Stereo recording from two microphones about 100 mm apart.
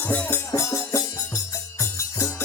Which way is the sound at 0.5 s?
30° left (ahead or behind).